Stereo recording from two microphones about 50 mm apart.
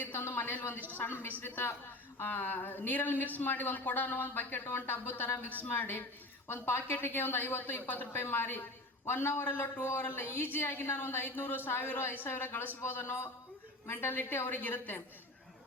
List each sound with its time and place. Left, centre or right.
0.1 s a woman's voice: left
6.5 s a woman's voice: left
10.0 s a woman's voice: left